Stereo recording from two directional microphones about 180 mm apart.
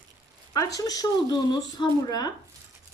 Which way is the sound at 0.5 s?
20° left (ahead or behind).